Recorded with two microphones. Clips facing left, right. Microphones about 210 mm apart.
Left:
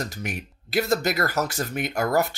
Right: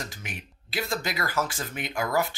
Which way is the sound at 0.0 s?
40° left (ahead or behind).